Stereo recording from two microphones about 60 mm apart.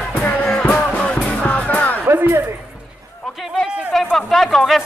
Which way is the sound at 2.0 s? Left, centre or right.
Right.